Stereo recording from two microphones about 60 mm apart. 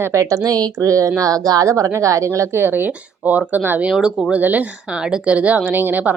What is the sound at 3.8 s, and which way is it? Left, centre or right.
Speech, centre.